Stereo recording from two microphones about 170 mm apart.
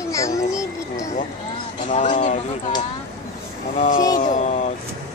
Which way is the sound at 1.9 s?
45° left (ahead or behind).